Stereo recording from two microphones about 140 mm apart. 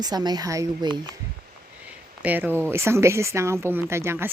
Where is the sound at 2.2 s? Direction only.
10° right (ahead or behind).